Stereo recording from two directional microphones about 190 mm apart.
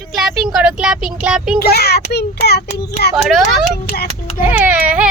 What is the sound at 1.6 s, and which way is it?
A child's voice, 55° left (ahead or behind).